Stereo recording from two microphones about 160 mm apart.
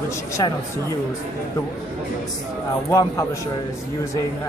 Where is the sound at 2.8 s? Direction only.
20° left (ahead or behind).